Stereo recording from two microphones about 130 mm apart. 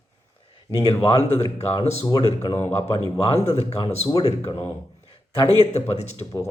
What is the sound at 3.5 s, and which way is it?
Speech, 50° left (ahead or behind).